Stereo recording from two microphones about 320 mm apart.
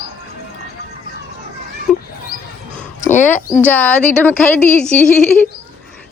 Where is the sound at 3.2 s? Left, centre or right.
Centre.